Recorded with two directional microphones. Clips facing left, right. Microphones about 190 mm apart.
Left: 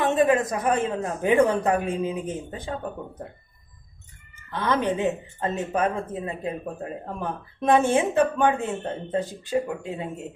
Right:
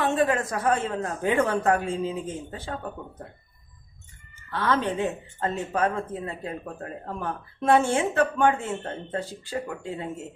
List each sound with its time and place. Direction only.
0.1 s speech: 20° left (ahead or behind)
4.5 s speech: 15° left (ahead or behind)